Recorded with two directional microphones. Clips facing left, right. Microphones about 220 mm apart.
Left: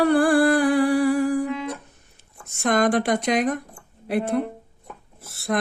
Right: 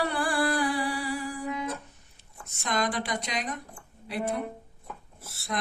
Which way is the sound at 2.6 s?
55° left (ahead or behind).